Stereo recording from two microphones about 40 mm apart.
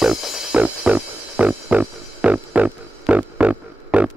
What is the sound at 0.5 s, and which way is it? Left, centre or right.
Music, right.